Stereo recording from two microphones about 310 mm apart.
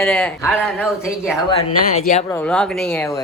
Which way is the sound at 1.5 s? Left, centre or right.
Left.